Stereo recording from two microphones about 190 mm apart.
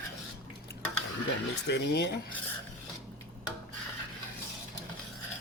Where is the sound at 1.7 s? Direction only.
60° left (ahead or behind).